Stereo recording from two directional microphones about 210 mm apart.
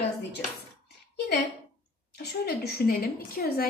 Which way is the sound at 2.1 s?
50° left (ahead or behind).